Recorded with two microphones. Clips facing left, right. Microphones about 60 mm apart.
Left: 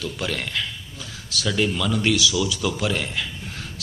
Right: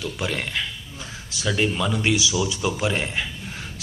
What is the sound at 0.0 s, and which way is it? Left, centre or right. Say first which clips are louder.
A man's voice: even; centre.